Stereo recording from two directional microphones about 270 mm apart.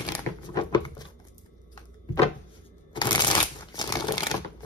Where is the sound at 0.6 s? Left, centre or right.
Centre.